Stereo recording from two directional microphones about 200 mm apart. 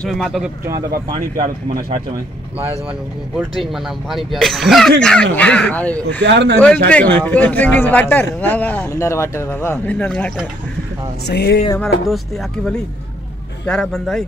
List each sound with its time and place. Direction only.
0.0 s speech: centre (ahead or behind)
0.7 s a man's voice: 20° right (ahead or behind)
3.3 s speech: centre (ahead or behind)
6.2 s speech: 55° right (ahead or behind)
6.6 s a man's voice: 5° left (ahead or behind)
11.2 s music: 55° left (ahead or behind)
13.7 s speech: 5° left (ahead or behind)